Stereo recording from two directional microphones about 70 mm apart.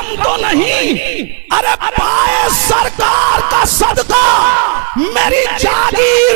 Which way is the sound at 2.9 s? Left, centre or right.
Right.